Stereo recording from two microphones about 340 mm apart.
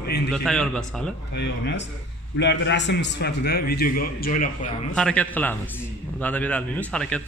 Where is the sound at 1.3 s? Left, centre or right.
Left.